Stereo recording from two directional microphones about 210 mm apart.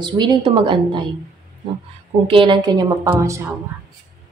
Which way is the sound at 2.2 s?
25° right (ahead or behind).